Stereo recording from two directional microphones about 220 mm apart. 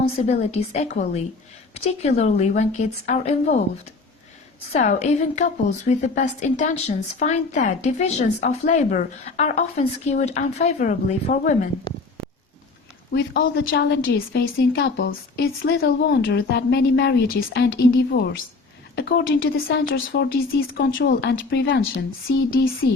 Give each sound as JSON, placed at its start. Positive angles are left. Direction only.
{"t": 0.3, "sound": "a woman's voice", "side_deg": 30}
{"t": 4.7, "sound": "a woman's voice", "side_deg": 30}
{"t": 13.1, "sound": "a woman's voice", "side_deg": 50}
{"t": 22.4, "sound": "a woman's voice", "side_deg": 40}